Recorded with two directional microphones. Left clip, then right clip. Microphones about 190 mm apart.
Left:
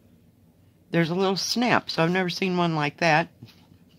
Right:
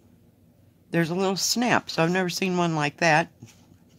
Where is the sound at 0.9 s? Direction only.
5° left (ahead or behind).